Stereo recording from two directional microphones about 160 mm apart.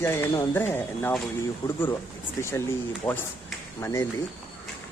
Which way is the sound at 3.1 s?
20° left (ahead or behind).